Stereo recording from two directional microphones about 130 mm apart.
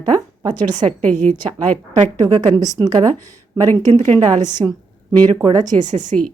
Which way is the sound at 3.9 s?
60° right (ahead or behind).